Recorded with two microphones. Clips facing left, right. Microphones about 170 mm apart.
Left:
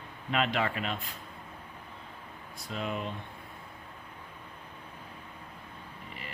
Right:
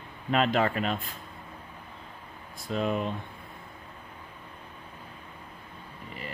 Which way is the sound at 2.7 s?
40° right (ahead or behind).